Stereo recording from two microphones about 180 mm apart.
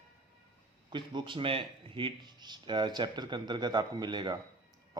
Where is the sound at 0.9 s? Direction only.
25° right (ahead or behind).